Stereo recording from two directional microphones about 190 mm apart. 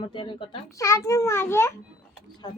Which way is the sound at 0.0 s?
25° left (ahead or behind).